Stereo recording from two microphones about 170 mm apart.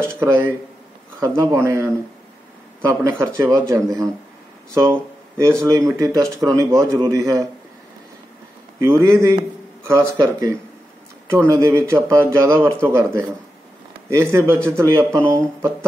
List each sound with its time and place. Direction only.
0.0 s speech: 15° right (ahead or behind)
2.9 s speech: 15° right (ahead or behind)
5.6 s speech: 20° right (ahead or behind)
8.7 s speech: 15° right (ahead or behind)